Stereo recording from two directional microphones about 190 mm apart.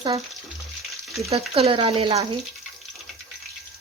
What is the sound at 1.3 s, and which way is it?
Speech, 30° right (ahead or behind).